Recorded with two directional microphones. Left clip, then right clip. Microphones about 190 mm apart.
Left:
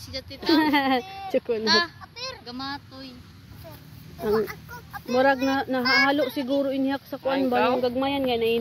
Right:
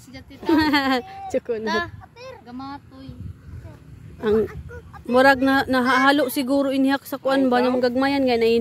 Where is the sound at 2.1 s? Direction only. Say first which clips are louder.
Left 4 dB; 30° right (ahead or behind).